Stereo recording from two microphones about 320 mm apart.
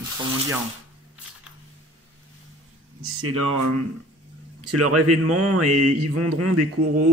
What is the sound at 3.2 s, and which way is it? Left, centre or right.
Speech, right.